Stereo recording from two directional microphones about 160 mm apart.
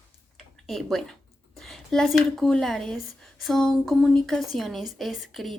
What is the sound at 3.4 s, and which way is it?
A woman's voice, centre (ahead or behind).